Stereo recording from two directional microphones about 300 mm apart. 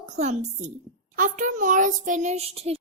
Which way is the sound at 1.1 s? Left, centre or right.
Right.